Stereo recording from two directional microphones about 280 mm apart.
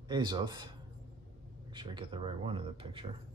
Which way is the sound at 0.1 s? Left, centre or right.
Centre.